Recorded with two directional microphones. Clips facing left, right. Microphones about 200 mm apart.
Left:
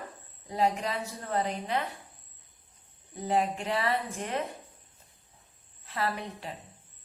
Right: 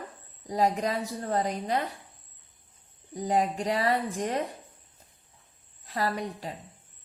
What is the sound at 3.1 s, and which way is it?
A woman's voice, 35° right (ahead or behind).